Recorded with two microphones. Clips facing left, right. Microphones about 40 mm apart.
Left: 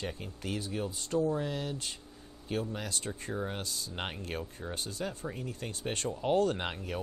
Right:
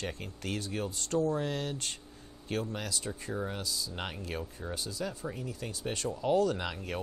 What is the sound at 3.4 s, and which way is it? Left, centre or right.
Speech, left.